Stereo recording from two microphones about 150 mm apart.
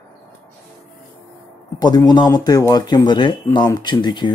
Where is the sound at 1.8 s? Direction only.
25° left (ahead or behind).